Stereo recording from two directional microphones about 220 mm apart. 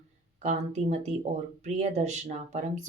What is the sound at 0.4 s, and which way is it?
Speech, 30° right (ahead or behind).